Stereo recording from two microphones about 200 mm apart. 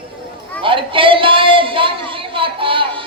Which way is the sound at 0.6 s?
25° right (ahead or behind).